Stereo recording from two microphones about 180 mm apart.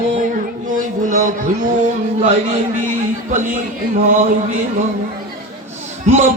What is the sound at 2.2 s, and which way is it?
A man's voice, 40° right (ahead or behind).